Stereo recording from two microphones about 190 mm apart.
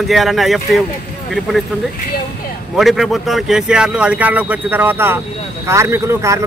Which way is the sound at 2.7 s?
Centre (ahead or behind).